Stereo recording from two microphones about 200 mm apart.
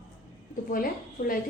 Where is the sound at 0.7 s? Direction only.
45° left (ahead or behind).